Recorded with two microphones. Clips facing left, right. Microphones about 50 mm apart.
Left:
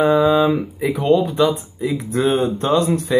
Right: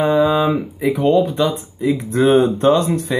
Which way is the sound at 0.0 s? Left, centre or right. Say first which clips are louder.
Left 1 dB; centre.